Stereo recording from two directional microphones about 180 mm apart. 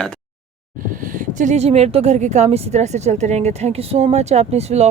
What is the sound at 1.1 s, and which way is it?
A woman's voice, 45° right (ahead or behind).